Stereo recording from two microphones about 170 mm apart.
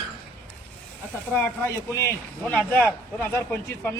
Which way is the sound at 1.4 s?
15° left (ahead or behind).